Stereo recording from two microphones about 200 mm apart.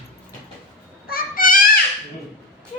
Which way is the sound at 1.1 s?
45° left (ahead or behind).